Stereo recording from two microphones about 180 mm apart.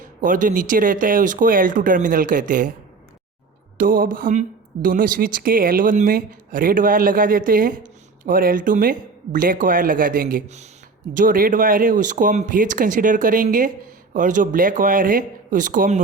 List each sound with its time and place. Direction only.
0.0 s speech: 45° right (ahead or behind)
3.8 s speech: 50° right (ahead or behind)